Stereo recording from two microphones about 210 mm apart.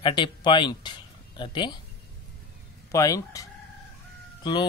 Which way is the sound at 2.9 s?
15° left (ahead or behind).